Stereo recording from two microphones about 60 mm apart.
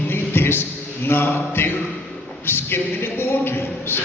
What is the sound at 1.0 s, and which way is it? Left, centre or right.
Mantra, left.